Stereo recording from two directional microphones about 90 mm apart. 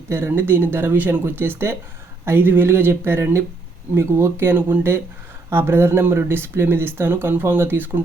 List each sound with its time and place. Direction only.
0.1 s speech: 25° right (ahead or behind)